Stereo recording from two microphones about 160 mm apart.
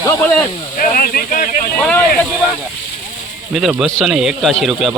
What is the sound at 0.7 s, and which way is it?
Speech, 60° left (ahead or behind).